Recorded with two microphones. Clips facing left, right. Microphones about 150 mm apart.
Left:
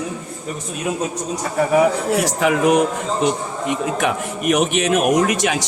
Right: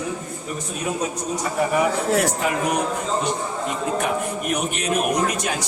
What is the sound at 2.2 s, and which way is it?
A man's voice, 90° left.